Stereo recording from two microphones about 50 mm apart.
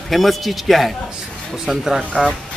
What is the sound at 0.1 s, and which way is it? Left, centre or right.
Speech, centre.